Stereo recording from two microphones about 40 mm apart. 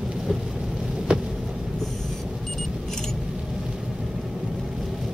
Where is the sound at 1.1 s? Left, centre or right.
Right.